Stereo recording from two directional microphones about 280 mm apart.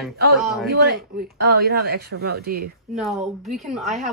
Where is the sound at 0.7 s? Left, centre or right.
Right.